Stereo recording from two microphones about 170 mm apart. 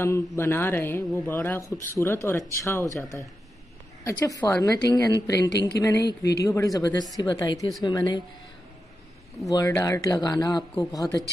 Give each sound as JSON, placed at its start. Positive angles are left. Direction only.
{"t": 0.0, "sound": "speech", "side_deg": 15}
{"t": 4.0, "sound": "speech", "side_deg": 15}
{"t": 4.6, "sound": "speech", "side_deg": 20}
{"t": 5.5, "sound": "a man's voice", "side_deg": 80}
{"t": 5.8, "sound": "speech", "side_deg": 20}
{"t": 6.0, "sound": "a man's voice", "side_deg": 75}
{"t": 6.4, "sound": "speech", "side_deg": 20}
{"t": 9.5, "sound": "speech", "side_deg": 20}